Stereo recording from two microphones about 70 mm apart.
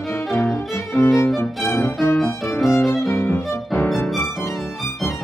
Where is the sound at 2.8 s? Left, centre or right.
Centre.